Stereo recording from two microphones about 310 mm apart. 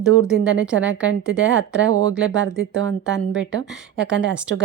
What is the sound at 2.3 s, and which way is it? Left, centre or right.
Speech, right.